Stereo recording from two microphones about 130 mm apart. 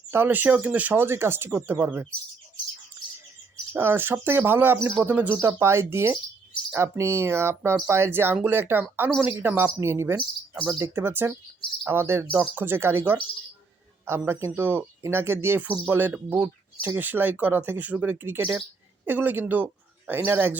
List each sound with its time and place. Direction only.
0.1 s speech: 15° right (ahead or behind)
3.7 s a woman's voice: 15° right (ahead or behind)